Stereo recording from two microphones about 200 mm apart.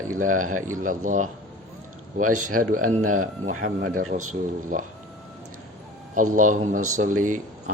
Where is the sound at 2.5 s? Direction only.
45° right (ahead or behind).